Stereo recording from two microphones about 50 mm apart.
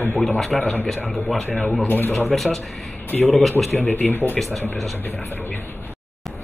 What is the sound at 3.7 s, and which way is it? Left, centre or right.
Speech, left.